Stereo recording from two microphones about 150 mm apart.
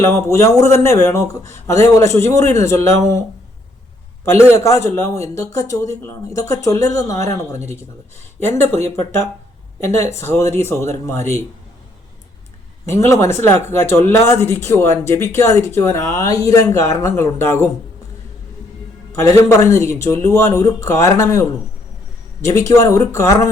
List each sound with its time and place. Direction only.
0.0 s speech: 20° left (ahead or behind)
4.3 s speech: 20° left (ahead or behind)
12.9 s speech: 20° left (ahead or behind)
19.1 s speech: 20° left (ahead or behind)